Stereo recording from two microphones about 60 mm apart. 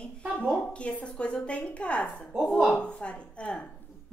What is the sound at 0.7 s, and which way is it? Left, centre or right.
A woman's voice, centre.